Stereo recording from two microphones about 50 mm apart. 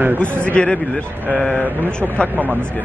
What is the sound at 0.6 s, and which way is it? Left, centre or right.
Speech, centre.